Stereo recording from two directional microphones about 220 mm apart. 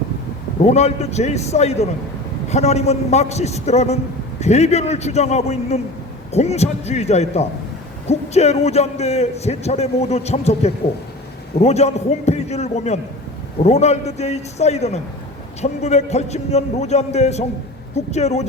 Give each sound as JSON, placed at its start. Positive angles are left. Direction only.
{"t": 0.6, "sound": "a man's voice", "side_deg": 30}